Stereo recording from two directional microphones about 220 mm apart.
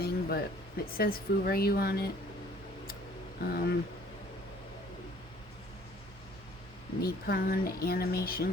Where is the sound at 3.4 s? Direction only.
45° left (ahead or behind).